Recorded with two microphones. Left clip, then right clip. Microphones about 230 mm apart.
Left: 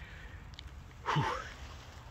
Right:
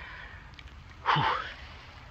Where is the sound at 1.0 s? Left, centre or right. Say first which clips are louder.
Right 8 dB; centre.